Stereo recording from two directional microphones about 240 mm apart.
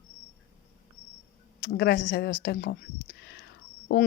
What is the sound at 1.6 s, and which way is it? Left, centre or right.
Speech, left.